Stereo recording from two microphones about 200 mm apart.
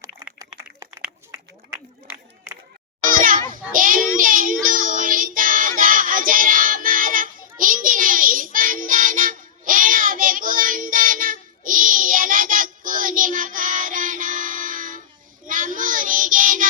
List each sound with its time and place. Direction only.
0.0 s a sound: 15° right (ahead or behind)
3.1 s children playing: 40° right (ahead or behind)
3.5 s child singing: 45° right (ahead or behind)